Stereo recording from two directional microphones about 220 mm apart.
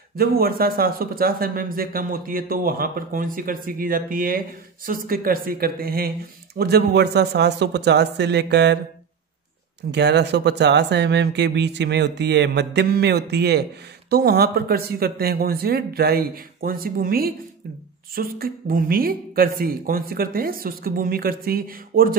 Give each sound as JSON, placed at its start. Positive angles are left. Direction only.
{"t": 0.1, "sound": "speech", "side_deg": -45}
{"t": 9.8, "sound": "speech", "side_deg": -50}